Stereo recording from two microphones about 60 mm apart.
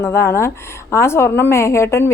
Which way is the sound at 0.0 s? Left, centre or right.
Left.